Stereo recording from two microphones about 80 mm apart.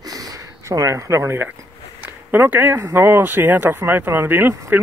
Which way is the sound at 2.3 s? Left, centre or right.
Right.